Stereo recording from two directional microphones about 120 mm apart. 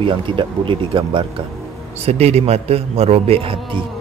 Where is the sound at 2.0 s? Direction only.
60° right (ahead or behind); by 3.9 s 45° right (ahead or behind).